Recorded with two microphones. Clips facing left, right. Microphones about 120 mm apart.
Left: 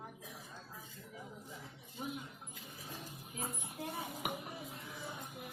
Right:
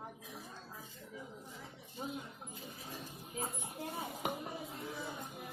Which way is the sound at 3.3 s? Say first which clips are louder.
Right 2 dB; 25° right (ahead or behind).